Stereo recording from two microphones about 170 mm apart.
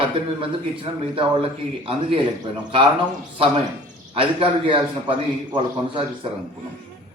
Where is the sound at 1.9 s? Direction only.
30° right (ahead or behind).